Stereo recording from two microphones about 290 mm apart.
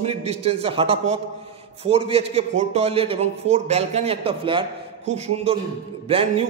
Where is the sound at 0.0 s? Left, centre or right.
Right.